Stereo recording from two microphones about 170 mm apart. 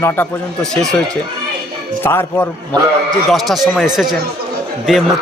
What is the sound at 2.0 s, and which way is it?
Speech, 15° left (ahead or behind).